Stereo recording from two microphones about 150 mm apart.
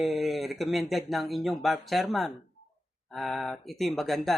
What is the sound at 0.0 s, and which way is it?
Speech, centre (ahead or behind).